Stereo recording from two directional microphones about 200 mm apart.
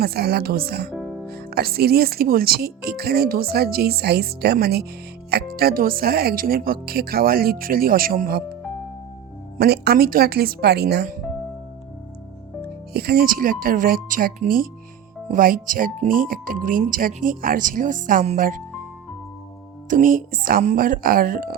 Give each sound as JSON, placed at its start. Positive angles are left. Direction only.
{"t": 0.0, "sound": "speech", "side_deg": -50}
{"t": 9.6, "sound": "speech", "side_deg": -55}
{"t": 12.9, "sound": "speech", "side_deg": -50}
{"t": 19.9, "sound": "speech", "side_deg": -45}